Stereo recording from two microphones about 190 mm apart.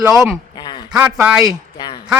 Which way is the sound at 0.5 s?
25° left (ahead or behind).